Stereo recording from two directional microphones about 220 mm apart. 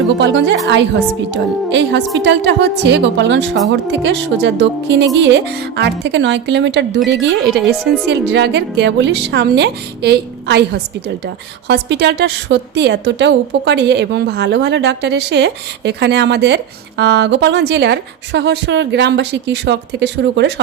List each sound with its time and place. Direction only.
0.1 s a woman's voice: 55° right (ahead or behind)